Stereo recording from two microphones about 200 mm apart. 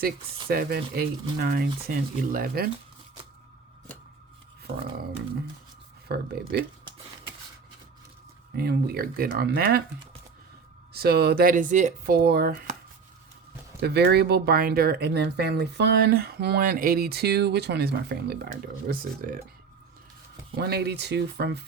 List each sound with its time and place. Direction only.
0.4 s speech: 50° right (ahead or behind)
6.1 s speech: 50° right (ahead or behind)
8.5 s speech: 50° right (ahead or behind)
10.9 s speech: 50° right (ahead or behind)
13.8 s speech: 55° right (ahead or behind)
20.6 s speech: 55° right (ahead or behind)